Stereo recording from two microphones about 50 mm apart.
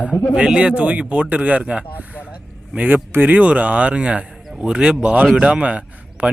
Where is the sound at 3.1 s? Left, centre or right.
Right.